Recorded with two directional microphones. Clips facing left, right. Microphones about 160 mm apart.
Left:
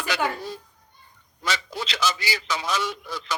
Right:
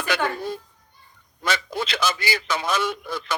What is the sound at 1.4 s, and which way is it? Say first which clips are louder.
A man's voice: right 4 dB; 55° right (ahead or behind).